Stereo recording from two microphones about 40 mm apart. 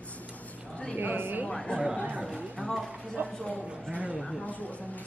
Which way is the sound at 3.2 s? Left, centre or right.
Right.